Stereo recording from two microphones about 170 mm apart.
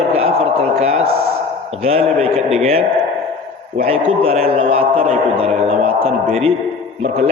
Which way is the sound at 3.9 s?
35° right (ahead or behind).